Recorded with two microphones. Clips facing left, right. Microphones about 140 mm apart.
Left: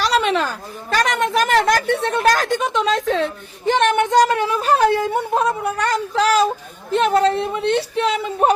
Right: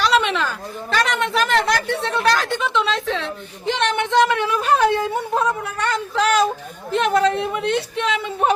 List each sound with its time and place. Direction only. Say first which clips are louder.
0.0 s a woman's voice: left 1 dB; 40° left (ahead or behind)